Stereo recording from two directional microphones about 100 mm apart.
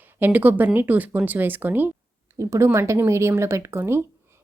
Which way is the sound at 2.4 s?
30° right (ahead or behind).